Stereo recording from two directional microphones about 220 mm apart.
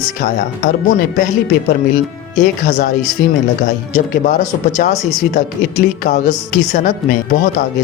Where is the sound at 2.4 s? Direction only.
35° left (ahead or behind).